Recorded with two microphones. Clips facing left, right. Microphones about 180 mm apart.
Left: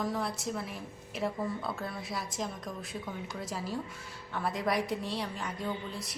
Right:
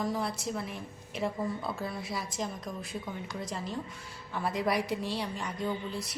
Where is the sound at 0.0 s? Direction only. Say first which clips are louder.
Right 1 dB; centre (ahead or behind).